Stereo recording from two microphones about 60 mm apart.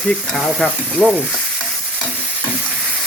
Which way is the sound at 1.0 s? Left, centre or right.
Centre.